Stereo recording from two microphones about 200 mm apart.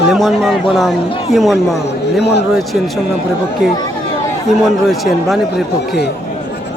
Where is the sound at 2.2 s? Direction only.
55° left (ahead or behind).